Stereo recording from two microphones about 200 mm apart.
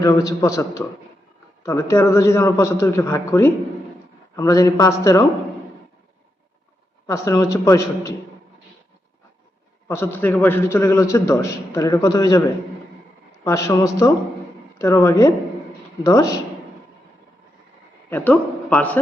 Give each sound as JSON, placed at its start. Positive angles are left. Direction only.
{"t": 0.0, "sound": "a man's voice", "side_deg": 15}
{"t": 7.1, "sound": "a man's voice", "side_deg": 15}
{"t": 9.9, "sound": "a man's voice", "side_deg": 10}
{"t": 13.4, "sound": "a man's voice", "side_deg": 15}
{"t": 18.1, "sound": "a man's voice", "side_deg": 10}